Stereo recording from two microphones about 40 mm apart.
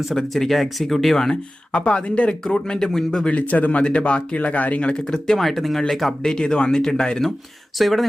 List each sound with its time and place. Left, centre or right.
0.0 s speech: centre
1.7 s speech: left
2.4 s speech: centre
3.3 s speech: left
3.8 s speech: left
5.1 s speech: centre
5.4 s speech: centre
6.3 s speech: left
7.8 s speech: centre